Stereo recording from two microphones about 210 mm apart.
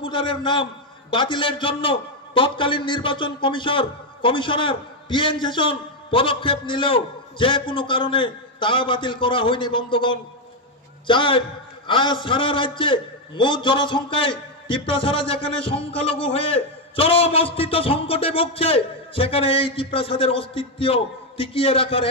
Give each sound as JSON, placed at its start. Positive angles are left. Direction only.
{"t": 0.0, "sound": "a man's voice", "side_deg": 25}